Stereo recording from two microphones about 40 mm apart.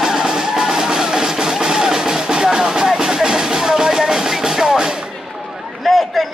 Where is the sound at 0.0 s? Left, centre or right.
Centre.